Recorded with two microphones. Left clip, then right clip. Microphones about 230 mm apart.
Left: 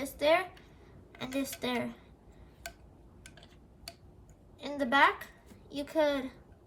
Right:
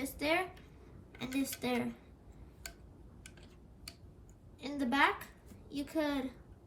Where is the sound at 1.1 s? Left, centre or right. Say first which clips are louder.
Left 2 dB; centre.